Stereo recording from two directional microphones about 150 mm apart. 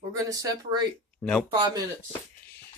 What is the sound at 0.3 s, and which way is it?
Speech, 25° right (ahead or behind).